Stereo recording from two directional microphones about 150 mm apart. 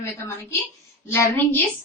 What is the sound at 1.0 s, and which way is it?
Speech, 15° left (ahead or behind).